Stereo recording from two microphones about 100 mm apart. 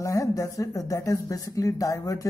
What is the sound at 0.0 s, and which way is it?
A man's voice, 30° left (ahead or behind).